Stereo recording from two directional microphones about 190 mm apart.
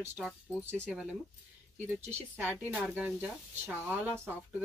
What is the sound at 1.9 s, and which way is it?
Speech, 10° right (ahead or behind).